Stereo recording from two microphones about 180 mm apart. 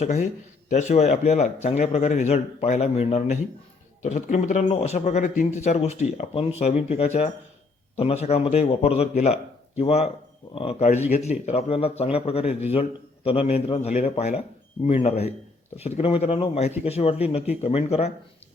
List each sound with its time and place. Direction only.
0.0 s speech: 40° left (ahead or behind)